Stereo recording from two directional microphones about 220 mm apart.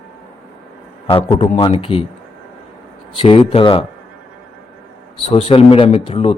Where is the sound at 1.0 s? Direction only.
25° left (ahead or behind).